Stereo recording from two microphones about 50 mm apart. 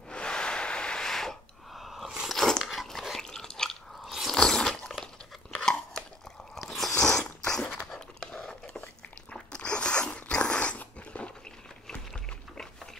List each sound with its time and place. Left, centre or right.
0.1 s a sound: centre
1.8 s a sound: centre
2.2 s dog: centre
3.3 s chewing: centre
4.0 s biting: centre
4.4 s biting: centre
5.0 s chewing: centre
6.5 s biting: centre
7.8 s dog: centre
8.3 s a sound: centre
9.3 s dog: left